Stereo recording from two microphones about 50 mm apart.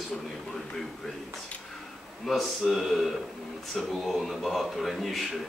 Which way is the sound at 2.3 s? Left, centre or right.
Centre.